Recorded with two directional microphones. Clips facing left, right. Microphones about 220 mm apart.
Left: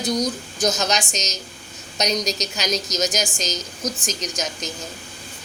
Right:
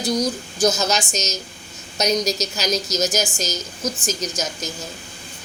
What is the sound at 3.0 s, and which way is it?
Speech, 15° left (ahead or behind).